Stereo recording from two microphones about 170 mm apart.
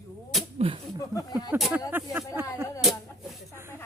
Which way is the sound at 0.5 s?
35° right (ahead or behind).